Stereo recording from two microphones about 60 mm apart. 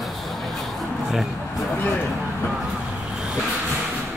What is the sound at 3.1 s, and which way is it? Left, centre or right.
Vehicle, centre.